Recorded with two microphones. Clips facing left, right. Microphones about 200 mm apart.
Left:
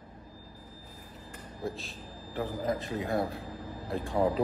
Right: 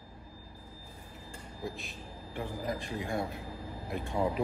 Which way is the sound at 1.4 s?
15° right (ahead or behind).